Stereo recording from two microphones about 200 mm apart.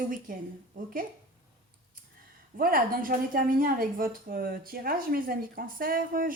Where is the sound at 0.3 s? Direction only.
45° right (ahead or behind).